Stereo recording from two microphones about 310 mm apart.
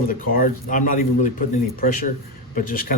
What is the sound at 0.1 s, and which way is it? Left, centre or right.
A man's voice, left.